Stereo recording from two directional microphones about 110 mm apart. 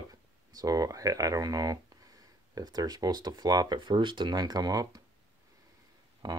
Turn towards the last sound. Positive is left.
turn(degrees=-40)  # may be behind; listen again after turning